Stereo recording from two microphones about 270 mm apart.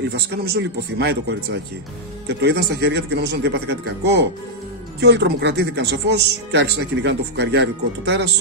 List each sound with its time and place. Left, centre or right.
0.5 s speech: right
2.2 s speech: right